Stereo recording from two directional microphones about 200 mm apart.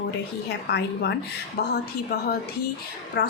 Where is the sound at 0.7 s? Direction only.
55° left (ahead or behind).